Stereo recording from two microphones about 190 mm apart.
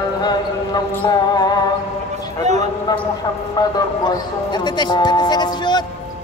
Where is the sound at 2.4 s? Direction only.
40° right (ahead or behind).